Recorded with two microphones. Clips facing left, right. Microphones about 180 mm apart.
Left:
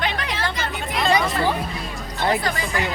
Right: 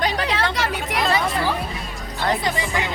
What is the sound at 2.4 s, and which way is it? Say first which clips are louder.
Speech: right 1 dB; 20° right (ahead or behind).